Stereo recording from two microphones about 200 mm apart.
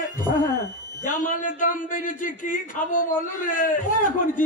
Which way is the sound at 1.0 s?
40° left (ahead or behind).